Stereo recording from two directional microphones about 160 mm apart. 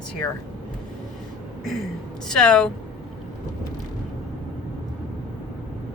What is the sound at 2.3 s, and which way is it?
Speech, 5° left (ahead or behind).